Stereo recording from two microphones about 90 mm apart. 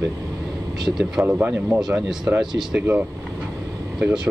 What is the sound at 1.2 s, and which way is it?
Speech, 20° right (ahead or behind).